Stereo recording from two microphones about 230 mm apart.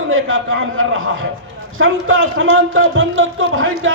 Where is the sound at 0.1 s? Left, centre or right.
Right.